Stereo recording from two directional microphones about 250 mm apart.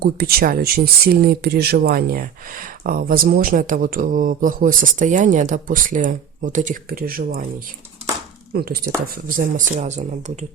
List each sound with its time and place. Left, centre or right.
0.0 s speech: right
8.5 s speech: right